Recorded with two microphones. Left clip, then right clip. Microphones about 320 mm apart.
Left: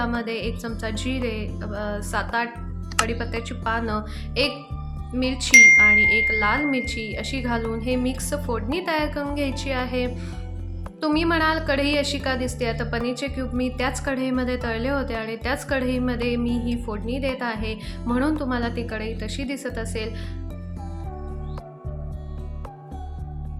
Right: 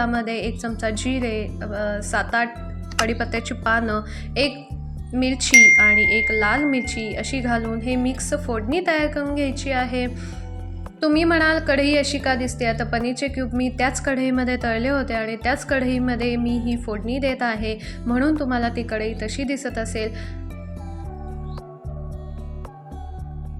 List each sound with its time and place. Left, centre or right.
0.0 s a woman's voice: centre
5.5 s speech: centre
5.7 s a woman's voice: centre